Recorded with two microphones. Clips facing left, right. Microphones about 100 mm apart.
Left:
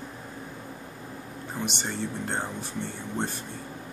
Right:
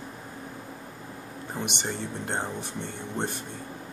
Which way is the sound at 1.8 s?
15° right (ahead or behind).